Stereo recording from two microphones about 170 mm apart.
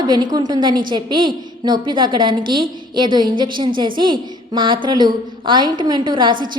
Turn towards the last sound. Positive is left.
turn(degrees=-30)  # may be behind; listen again after turning